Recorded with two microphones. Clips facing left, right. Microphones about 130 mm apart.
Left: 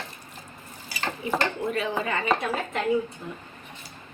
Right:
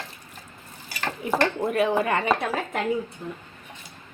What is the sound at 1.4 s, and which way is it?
Chopping, 55° right (ahead or behind).